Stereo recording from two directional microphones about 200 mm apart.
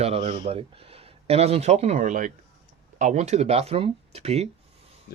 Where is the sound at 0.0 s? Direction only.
30° right (ahead or behind).